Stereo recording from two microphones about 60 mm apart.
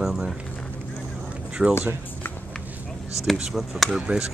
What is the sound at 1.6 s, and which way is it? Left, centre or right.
Speech, centre.